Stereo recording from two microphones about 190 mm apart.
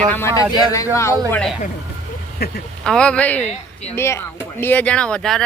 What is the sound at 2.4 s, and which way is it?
Speech, 55° left (ahead or behind).